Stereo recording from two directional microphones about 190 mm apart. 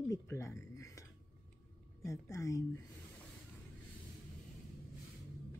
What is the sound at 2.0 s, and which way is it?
Speech, 15° left (ahead or behind).